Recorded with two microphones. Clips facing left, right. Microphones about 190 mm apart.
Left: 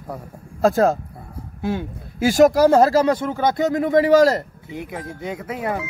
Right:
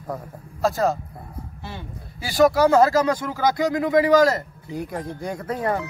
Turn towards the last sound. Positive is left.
turn(degrees=5)  # may be behind; listen again after turning